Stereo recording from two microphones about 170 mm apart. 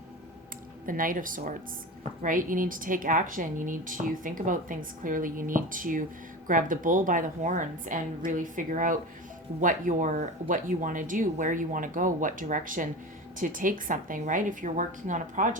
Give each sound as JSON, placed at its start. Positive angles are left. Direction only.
{"t": 0.9, "sound": "speech", "side_deg": -55}